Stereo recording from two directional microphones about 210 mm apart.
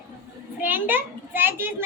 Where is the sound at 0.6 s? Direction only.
10° right (ahead or behind).